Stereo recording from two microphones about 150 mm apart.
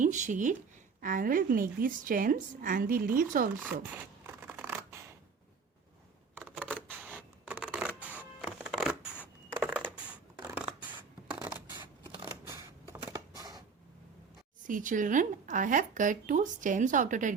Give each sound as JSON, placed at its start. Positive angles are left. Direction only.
{"t": 0.0, "sound": "speech", "side_deg": -55}
{"t": 1.0, "sound": "a woman's voice", "side_deg": -65}
{"t": 3.8, "sound": "scissors", "side_deg": -15}
{"t": 6.3, "sound": "a sound", "side_deg": -10}
{"t": 6.8, "sound": "music", "side_deg": -10}
{"t": 9.6, "sound": "scissors", "side_deg": -10}
{"t": 12.3, "sound": "a sound", "side_deg": -15}
{"t": 14.6, "sound": "speech", "side_deg": -60}